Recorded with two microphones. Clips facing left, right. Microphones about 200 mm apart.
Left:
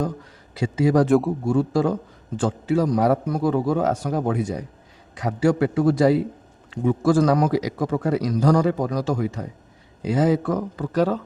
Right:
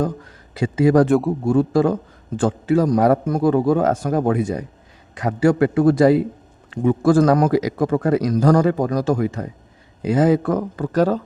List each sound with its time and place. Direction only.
0.5 s a man's voice: 55° right (ahead or behind)
1.0 s a man's voice: centre (ahead or behind)
1.5 s a man's voice: 55° right (ahead or behind)